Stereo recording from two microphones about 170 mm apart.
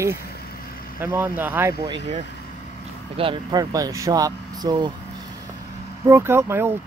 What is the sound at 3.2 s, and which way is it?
Speech, 30° right (ahead or behind).